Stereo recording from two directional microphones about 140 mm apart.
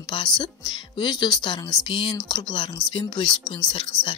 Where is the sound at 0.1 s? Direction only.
35° left (ahead or behind).